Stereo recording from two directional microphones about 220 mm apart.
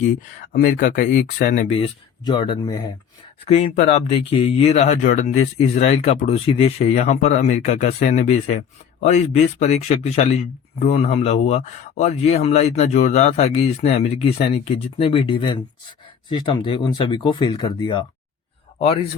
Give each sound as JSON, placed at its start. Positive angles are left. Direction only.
{"t": 0.2, "sound": "speech", "side_deg": 40}
{"t": 2.2, "sound": "speech", "side_deg": 20}